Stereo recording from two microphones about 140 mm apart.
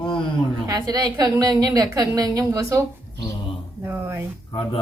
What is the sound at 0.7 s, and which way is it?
A woman's voice, 25° right (ahead or behind).